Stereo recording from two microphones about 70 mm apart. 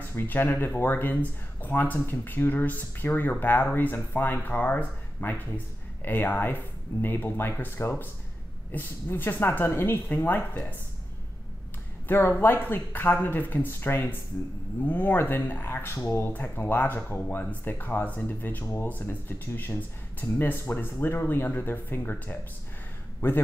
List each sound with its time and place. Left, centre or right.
0.1 s speech: left
12.1 s speech: left